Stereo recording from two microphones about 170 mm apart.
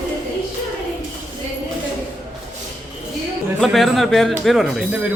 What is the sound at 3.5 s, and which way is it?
Speech, centre (ahead or behind).